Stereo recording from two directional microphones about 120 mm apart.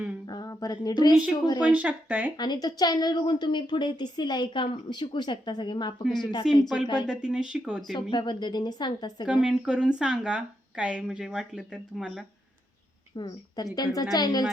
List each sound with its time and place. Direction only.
0.3 s speech: 30° left (ahead or behind)
1.7 s speech: 15° right (ahead or behind)
2.3 s speech: 35° left (ahead or behind)
6.0 s speech: centre (ahead or behind)
8.1 s speech: 40° left (ahead or behind)
9.2 s speech: 5° right (ahead or behind)
13.1 s speech: 35° left (ahead or behind)